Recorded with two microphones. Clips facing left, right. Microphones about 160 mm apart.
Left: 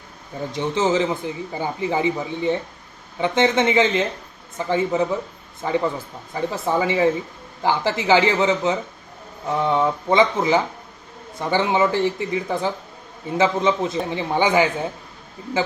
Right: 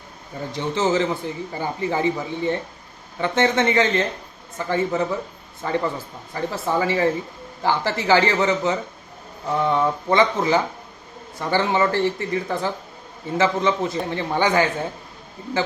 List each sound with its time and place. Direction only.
0.5 s speech: 15° left (ahead or behind)